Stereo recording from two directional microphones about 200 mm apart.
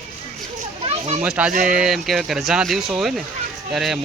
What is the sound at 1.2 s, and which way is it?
Speech, 5° right (ahead or behind).